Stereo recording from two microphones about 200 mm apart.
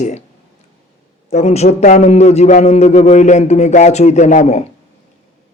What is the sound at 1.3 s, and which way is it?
A man's voice, 35° left (ahead or behind).